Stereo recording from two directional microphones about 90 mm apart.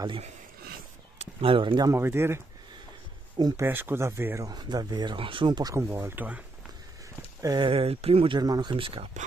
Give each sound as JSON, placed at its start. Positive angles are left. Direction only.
{"t": 1.4, "sound": "speech", "side_deg": -75}
{"t": 1.9, "sound": "speech", "side_deg": -25}
{"t": 3.3, "sound": "speech", "side_deg": -45}
{"t": 3.6, "sound": "speech", "side_deg": -25}
{"t": 4.5, "sound": "speech", "side_deg": -50}
{"t": 5.1, "sound": "speech", "side_deg": -70}
{"t": 5.8, "sound": "speech", "side_deg": -30}
{"t": 7.6, "sound": "speech", "side_deg": -90}
{"t": 8.4, "sound": "speech", "side_deg": -50}